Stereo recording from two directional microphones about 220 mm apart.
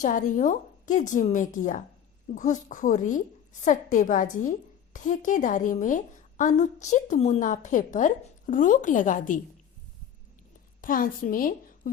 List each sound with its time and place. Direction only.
0.0 s a woman's voice: 35° left (ahead or behind)
10.8 s a woman's voice: 40° left (ahead or behind)